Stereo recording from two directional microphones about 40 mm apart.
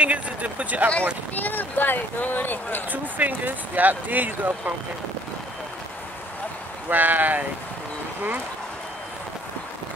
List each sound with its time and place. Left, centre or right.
0.0 s speech: right
1.3 s speech: left
2.9 s speech: right
6.9 s speech: right